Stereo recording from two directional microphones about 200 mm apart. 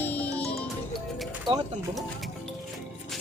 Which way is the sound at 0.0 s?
10° left (ahead or behind).